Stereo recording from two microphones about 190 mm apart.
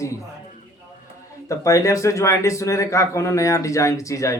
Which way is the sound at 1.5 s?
15° left (ahead or behind).